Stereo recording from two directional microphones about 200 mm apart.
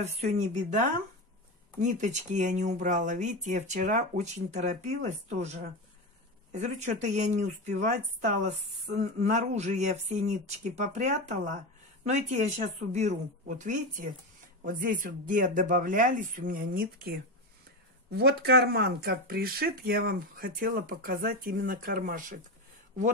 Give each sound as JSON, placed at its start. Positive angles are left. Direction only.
{"t": 0.0, "sound": "speech", "side_deg": -35}
{"t": 13.5, "sound": "speech", "side_deg": -40}